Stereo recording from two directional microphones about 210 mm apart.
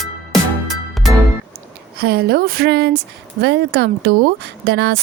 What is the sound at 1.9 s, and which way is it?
Speech, 45° right (ahead or behind).